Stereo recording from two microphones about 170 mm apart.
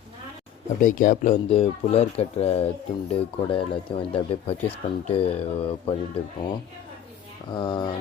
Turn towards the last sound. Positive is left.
turn(degrees=25)  # may be behind; listen again after turning